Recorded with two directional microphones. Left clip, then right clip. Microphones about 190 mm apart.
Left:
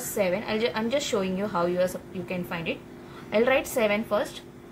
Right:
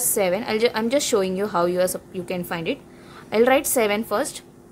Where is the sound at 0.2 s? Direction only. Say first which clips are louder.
Right 5 dB; 55° right (ahead or behind).